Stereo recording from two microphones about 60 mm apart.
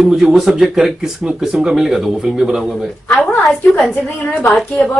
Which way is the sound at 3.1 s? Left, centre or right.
Left.